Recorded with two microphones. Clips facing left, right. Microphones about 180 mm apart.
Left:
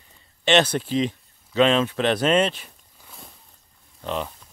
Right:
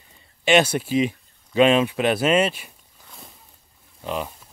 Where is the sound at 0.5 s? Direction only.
10° right (ahead or behind).